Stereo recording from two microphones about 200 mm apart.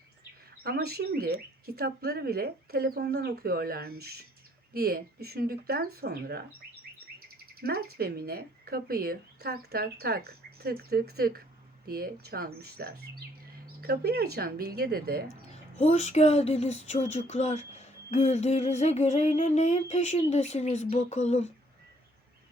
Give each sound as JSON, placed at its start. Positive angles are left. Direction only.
{"t": 0.6, "sound": "speech", "side_deg": -50}
{"t": 7.6, "sound": "speech", "side_deg": -50}
{"t": 15.8, "sound": "speech", "side_deg": 35}